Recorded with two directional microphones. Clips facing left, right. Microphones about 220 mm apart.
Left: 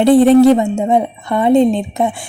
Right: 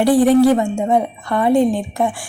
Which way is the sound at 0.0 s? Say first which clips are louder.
Left 4 dB; 25° left (ahead or behind).